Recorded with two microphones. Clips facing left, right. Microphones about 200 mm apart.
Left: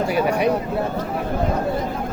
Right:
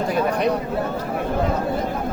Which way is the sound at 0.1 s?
10° left (ahead or behind).